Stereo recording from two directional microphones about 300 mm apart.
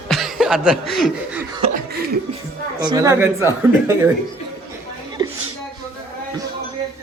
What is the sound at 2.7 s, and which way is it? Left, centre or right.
A woman's voice, centre.